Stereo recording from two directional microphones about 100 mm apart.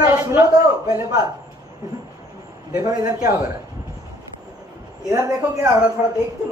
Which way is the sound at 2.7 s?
35° right (ahead or behind).